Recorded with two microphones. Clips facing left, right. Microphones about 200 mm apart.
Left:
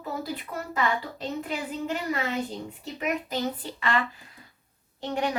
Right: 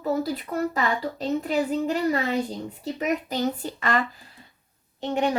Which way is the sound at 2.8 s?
40° right (ahead or behind).